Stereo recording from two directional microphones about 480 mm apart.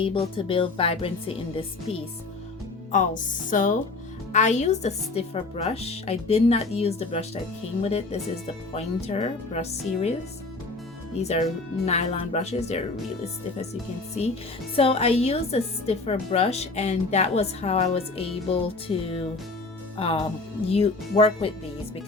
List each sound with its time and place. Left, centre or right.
0.0 s a woman's voice: centre
14.8 s a woman's voice: centre